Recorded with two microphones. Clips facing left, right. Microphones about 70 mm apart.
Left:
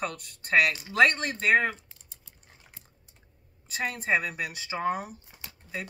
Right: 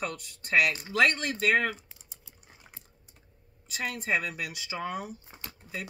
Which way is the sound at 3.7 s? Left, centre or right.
Left.